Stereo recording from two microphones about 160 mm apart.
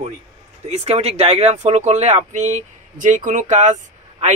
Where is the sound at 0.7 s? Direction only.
40° right (ahead or behind).